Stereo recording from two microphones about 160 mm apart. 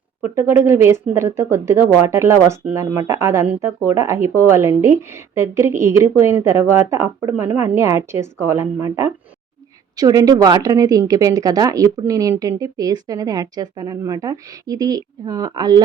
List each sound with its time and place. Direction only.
0.2 s speech: 15° right (ahead or behind)